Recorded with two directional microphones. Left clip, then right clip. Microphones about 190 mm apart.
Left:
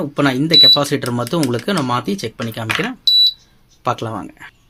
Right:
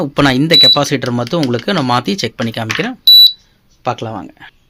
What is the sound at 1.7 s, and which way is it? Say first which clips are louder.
Speech: right 5 dB; 30° right (ahead or behind).